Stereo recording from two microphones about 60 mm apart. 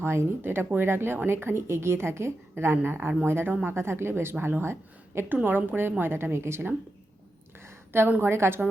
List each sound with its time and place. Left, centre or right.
0.0 s a woman's voice: right
5.4 s speech: right
7.6 s a sound: right
8.2 s speech: right